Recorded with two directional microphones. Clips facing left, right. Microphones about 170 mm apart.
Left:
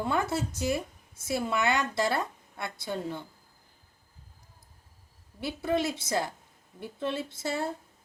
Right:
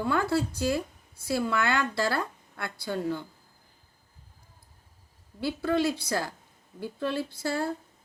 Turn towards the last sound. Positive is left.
turn(degrees=20)  # may be behind; listen again after turning